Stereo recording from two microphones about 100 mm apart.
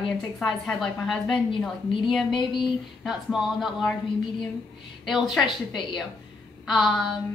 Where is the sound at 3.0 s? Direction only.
5° right (ahead or behind).